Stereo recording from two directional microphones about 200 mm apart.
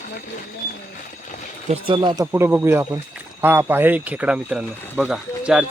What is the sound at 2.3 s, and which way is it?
Speech, 10° right (ahead or behind).